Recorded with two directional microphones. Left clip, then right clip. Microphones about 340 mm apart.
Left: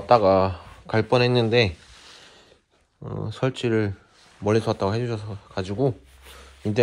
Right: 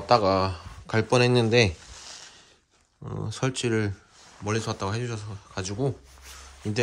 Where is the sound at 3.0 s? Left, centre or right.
Centre.